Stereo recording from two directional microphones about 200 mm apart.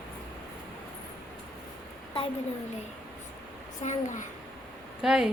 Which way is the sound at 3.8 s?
35° left (ahead or behind).